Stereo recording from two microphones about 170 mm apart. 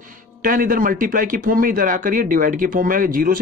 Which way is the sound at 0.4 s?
55° right (ahead or behind).